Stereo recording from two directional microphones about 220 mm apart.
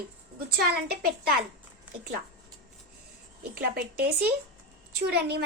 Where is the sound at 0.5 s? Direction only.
45° right (ahead or behind).